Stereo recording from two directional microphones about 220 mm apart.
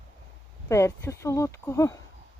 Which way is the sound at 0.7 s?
10° left (ahead or behind).